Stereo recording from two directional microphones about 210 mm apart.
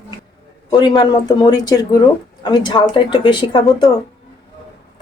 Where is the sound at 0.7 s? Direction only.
20° left (ahead or behind).